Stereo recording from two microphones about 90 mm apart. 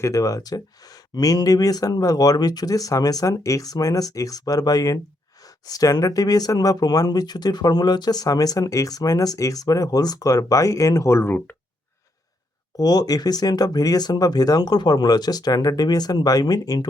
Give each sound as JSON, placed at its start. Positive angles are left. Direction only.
{"t": 0.0, "sound": "speech", "side_deg": 40}
{"t": 12.7, "sound": "speech", "side_deg": 45}